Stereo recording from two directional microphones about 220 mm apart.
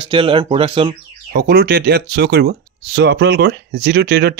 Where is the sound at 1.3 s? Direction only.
45° right (ahead or behind).